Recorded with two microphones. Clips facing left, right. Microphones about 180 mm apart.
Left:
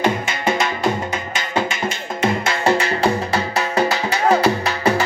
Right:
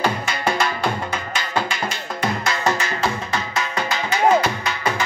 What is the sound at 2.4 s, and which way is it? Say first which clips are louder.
Music: left 4 dB; 30° left (ahead or behind).